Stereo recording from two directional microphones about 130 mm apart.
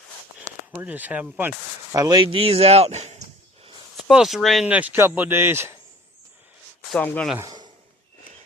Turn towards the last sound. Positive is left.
turn(degrees=-30)  # may be behind; listen again after turning